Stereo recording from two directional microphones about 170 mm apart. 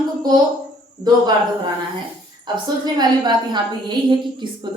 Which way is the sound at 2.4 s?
25° right (ahead or behind).